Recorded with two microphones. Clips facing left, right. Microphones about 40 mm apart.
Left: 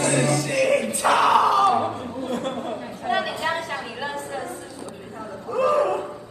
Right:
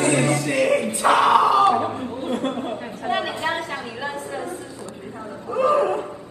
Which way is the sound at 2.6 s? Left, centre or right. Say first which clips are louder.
Right 1 dB; right.